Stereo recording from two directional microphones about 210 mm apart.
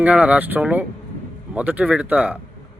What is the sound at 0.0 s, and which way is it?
Speech, 5° right (ahead or behind).